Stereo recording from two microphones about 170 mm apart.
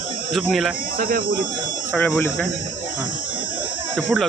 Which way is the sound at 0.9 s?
60° right (ahead or behind).